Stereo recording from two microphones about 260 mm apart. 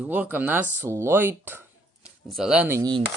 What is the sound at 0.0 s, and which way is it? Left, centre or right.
Speech, centre.